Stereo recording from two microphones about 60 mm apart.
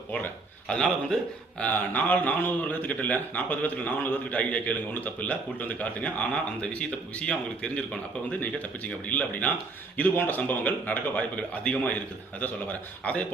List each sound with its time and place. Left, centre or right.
0.7 s a man's voice: centre
1.6 s a man's voice: left
13.0 s a man's voice: left